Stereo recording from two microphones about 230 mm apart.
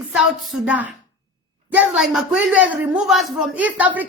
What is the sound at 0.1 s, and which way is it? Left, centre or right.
A woman's voice, centre.